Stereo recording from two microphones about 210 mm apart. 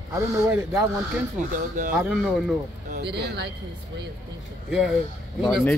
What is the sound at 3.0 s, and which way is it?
Speech, 50° right (ahead or behind).